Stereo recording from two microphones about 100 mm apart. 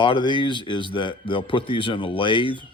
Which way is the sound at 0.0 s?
50° left (ahead or behind).